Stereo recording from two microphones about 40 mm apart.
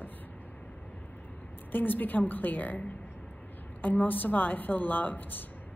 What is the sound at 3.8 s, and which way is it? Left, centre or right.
A woman's voice, left.